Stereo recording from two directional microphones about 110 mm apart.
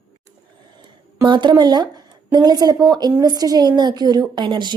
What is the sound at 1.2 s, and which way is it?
A woman's voice, 45° right (ahead or behind).